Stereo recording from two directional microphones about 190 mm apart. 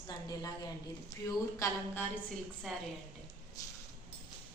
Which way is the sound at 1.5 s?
15° left (ahead or behind).